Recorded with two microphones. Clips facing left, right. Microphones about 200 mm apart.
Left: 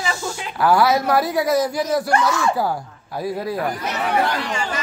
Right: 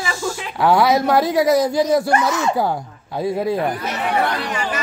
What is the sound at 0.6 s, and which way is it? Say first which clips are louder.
Speech: right 2 dB; 20° right (ahead or behind).